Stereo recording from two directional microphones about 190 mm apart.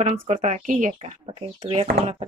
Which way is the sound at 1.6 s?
30° right (ahead or behind).